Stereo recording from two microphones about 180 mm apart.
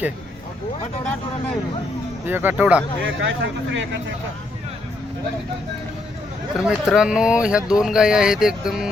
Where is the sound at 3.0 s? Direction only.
90° right.